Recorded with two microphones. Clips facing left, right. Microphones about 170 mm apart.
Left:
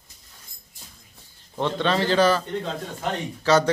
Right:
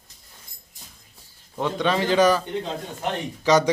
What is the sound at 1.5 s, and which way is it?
A man's voice, 10° right (ahead or behind).